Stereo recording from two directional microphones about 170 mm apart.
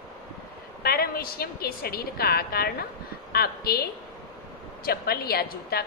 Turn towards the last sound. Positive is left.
turn(degrees=65)  # may be behind; listen again after turning